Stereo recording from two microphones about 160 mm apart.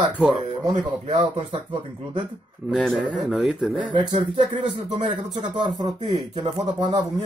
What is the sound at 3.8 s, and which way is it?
Speech, 30° right (ahead or behind).